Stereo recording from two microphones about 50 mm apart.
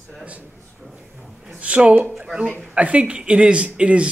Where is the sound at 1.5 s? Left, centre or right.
Right.